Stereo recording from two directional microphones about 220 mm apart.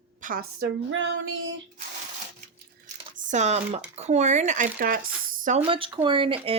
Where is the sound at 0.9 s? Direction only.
60° right (ahead or behind).